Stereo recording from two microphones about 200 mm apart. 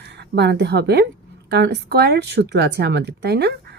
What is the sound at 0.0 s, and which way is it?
A woman's voice, 55° right (ahead or behind).